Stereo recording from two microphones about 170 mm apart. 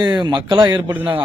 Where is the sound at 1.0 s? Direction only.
10° right (ahead or behind).